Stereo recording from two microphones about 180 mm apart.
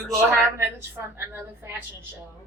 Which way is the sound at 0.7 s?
15° right (ahead or behind).